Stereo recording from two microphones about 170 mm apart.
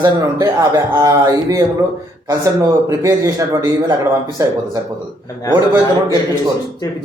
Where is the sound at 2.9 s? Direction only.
20° right (ahead or behind).